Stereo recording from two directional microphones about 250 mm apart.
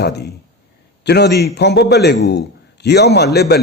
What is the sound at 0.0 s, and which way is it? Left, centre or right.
A man's voice, left.